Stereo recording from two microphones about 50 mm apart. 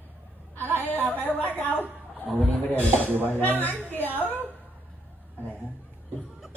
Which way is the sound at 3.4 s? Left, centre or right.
Right.